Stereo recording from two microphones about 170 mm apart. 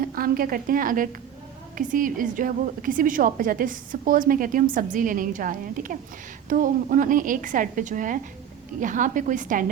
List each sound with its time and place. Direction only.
0.0 s a woman's voice: 60° right (ahead or behind)